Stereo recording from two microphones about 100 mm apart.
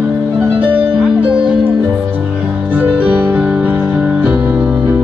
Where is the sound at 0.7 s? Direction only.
15° right (ahead or behind).